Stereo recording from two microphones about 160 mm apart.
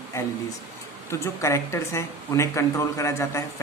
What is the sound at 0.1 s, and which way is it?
Speech, 15° left (ahead or behind).